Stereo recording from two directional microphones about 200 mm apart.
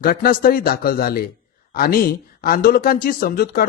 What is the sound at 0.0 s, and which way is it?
Speech, 50° left (ahead or behind).